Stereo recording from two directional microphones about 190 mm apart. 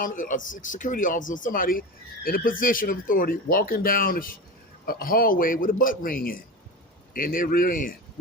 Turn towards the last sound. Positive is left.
turn(degrees=45)  # may be behind; listen again after turning